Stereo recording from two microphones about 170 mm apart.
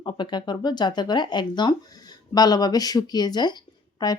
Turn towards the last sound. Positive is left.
turn(degrees=25)  # may be behind; listen again after turning